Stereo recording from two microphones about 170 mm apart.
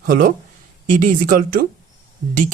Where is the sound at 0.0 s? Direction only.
55° right (ahead or behind).